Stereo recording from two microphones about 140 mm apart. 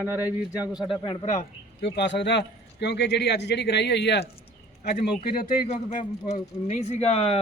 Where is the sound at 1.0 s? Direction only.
45° left (ahead or behind).